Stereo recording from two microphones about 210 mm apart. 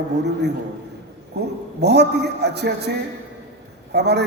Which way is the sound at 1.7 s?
50° right (ahead or behind).